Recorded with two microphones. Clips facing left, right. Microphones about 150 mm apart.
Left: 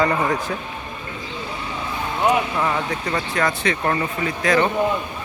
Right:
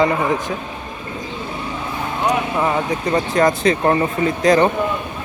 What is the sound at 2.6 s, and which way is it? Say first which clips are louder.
Speech: right 4 dB; 20° right (ahead or behind).